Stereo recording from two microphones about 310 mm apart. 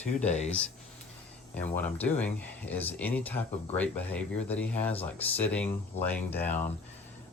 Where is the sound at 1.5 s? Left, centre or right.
Centre.